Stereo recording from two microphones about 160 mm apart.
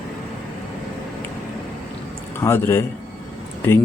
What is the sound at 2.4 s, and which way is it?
Speech, 15° left (ahead or behind).